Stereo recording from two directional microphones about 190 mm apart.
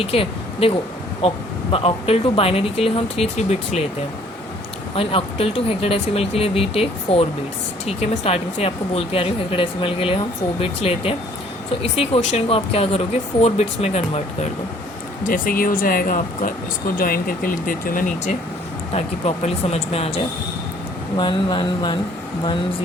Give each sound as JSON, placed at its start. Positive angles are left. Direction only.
{"t": 0.0, "sound": "speech", "side_deg": 30}
{"t": 4.9, "sound": "speech", "side_deg": 30}
{"t": 15.3, "sound": "speech", "side_deg": 50}
{"t": 19.7, "sound": "speech", "side_deg": 30}